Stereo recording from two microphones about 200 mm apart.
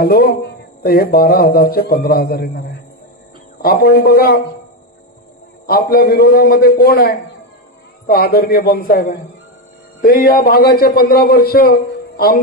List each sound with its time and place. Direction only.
0.0 s speech: 50° left (ahead or behind)
5.7 s speech: 50° left (ahead or behind)